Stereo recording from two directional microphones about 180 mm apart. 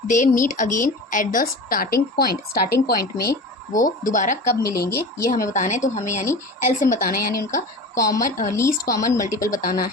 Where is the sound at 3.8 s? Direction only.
45° left (ahead or behind).